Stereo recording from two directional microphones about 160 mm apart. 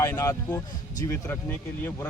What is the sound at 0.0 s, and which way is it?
Speech, 20° left (ahead or behind).